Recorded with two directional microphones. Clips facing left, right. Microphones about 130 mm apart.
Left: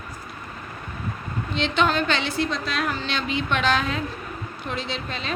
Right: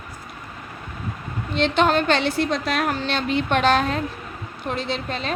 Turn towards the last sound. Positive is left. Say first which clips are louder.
# right 4 dB
turn(degrees=-45)  # may be behind; listen again after turning